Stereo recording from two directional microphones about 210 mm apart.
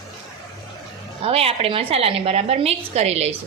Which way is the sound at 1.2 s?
30° right (ahead or behind).